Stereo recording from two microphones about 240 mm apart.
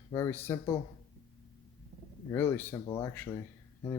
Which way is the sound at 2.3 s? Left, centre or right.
Centre.